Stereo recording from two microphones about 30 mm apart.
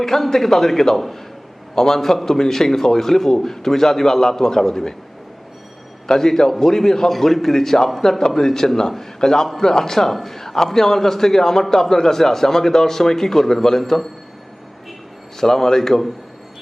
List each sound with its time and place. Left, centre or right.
0.0 s a man's voice: centre
6.1 s a man's voice: centre
7.1 s a man's voice: centre
15.4 s a man's voice: centre